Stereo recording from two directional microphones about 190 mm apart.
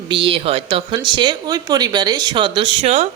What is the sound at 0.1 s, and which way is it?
A woman's voice, 25° right (ahead or behind).